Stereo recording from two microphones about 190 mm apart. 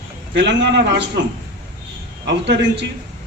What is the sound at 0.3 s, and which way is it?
Speech, 65° right (ahead or behind).